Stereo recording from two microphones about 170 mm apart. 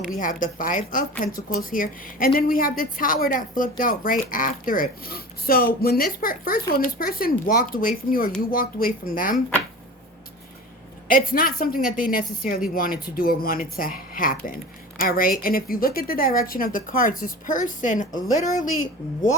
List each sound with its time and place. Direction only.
0.2 s a woman's voice: 50° left (ahead or behind)
11.1 s a woman's voice: 55° left (ahead or behind)